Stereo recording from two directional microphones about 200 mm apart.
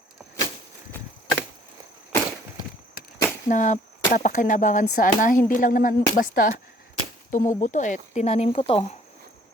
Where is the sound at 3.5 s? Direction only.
40° left (ahead or behind).